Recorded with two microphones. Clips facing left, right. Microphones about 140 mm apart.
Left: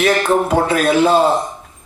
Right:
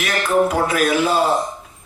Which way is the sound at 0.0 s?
30° left (ahead or behind).